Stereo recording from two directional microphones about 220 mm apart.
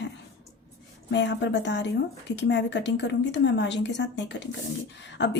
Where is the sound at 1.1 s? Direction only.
50° left (ahead or behind).